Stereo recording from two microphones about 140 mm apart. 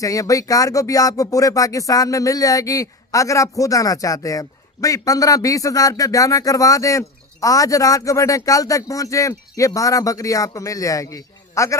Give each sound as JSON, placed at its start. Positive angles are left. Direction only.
{"t": 0.0, "sound": "speech", "side_deg": 25}